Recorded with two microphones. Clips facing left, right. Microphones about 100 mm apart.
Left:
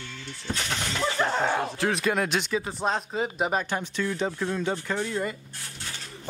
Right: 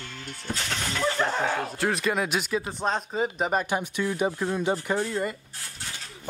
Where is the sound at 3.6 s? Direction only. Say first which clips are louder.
Right 2 dB; 15° right (ahead or behind).